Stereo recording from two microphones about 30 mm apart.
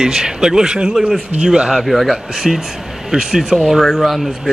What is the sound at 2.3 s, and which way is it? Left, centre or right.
Speech, centre.